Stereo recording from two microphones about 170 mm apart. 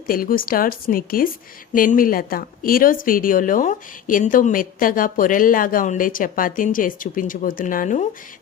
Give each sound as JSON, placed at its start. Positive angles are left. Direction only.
{"t": 0.1, "sound": "speech", "side_deg": 55}